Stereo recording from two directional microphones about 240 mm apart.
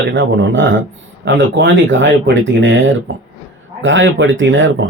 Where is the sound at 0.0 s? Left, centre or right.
Right.